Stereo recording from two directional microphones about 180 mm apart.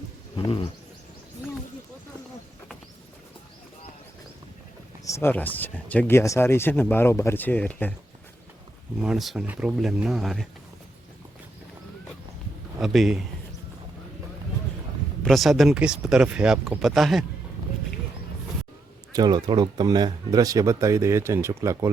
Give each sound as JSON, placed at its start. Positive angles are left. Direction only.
{"t": 0.3, "sound": "speech", "side_deg": 30}
{"t": 5.0, "sound": "speech", "side_deg": 15}
{"t": 9.0, "sound": "speech", "side_deg": -5}
{"t": 12.8, "sound": "speech", "side_deg": 0}
{"t": 15.2, "sound": "speech", "side_deg": 0}
{"t": 19.1, "sound": "speech", "side_deg": -25}